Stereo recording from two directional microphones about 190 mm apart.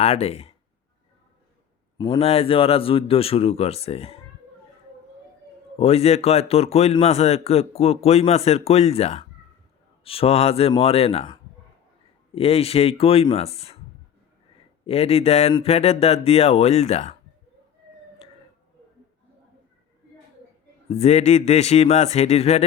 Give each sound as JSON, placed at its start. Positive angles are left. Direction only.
{"t": 0.0, "sound": "a man's voice", "side_deg": 35}
{"t": 2.0, "sound": "a man's voice", "side_deg": 25}
{"t": 5.8, "sound": "a man's voice", "side_deg": 35}
{"t": 14.8, "sound": "a man's voice", "side_deg": 30}
{"t": 20.9, "sound": "a man's voice", "side_deg": 35}